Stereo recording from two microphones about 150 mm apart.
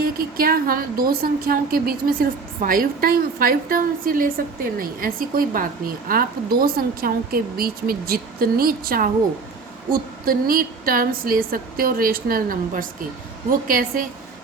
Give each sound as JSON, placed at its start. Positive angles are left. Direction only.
{"t": 0.0, "sound": "a woman's voice", "side_deg": -75}
{"t": 2.6, "sound": "a woman's voice", "side_deg": -70}